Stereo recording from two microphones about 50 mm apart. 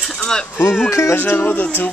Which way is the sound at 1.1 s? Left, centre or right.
Left.